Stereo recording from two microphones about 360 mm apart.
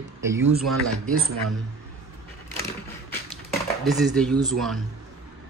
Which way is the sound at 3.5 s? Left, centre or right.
Centre.